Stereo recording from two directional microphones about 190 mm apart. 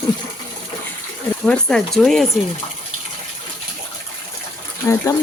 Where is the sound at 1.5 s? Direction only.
5° left (ahead or behind).